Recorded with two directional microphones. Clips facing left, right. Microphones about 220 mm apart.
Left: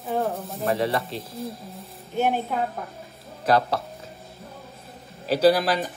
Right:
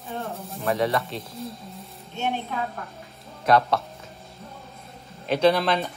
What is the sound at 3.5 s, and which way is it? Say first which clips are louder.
Speech: right 1 dB; 30° left (ahead or behind).